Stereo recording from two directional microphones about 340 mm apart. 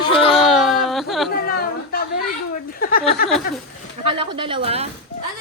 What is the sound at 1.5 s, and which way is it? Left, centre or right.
Chatter, left.